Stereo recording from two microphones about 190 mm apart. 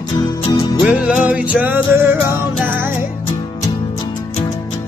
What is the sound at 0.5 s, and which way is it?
Music, 25° left (ahead or behind).